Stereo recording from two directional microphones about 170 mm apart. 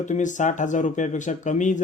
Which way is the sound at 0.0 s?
45° left (ahead or behind).